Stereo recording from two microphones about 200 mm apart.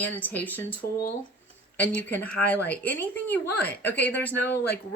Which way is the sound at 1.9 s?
10° left (ahead or behind).